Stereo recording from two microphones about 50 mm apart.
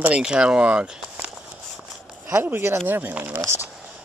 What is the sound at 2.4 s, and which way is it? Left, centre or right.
Speech, right.